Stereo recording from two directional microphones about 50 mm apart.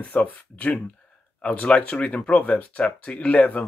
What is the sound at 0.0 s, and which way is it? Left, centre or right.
Speech, left.